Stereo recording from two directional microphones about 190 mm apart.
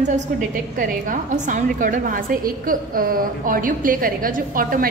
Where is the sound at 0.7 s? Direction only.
45° right (ahead or behind).